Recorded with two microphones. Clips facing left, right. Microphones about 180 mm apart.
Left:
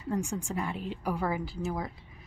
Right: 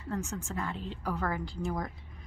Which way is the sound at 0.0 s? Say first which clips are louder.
Left 4 dB; 15° left (ahead or behind).